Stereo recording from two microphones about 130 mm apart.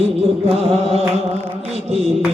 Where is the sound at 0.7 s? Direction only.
50° right (ahead or behind).